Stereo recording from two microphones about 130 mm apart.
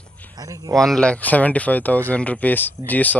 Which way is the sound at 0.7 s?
5° left (ahead or behind).